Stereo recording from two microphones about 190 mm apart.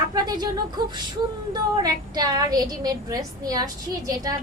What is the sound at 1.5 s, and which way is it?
A woman's voice, 20° right (ahead or behind).